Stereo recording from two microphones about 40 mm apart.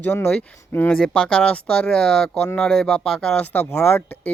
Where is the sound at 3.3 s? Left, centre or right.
Left.